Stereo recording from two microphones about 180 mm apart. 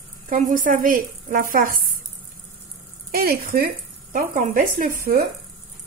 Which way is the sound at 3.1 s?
55° right (ahead or behind).